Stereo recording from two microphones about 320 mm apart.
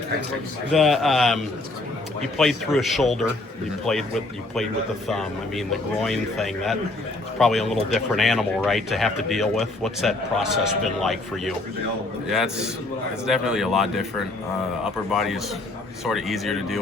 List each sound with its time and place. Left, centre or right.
0.7 s speech: centre